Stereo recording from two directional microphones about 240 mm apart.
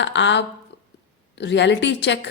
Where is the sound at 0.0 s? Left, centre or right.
Left.